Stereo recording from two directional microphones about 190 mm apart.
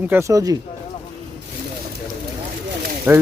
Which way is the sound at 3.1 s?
15° right (ahead or behind).